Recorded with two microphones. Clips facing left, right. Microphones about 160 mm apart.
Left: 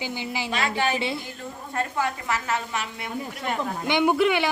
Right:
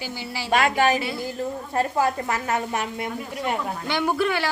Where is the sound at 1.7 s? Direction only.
35° right (ahead or behind).